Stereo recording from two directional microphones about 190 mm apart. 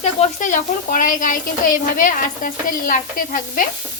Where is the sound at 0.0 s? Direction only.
40° left (ahead or behind).